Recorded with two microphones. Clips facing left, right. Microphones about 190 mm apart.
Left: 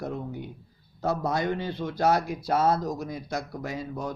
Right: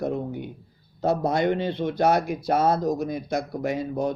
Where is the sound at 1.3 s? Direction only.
25° right (ahead or behind).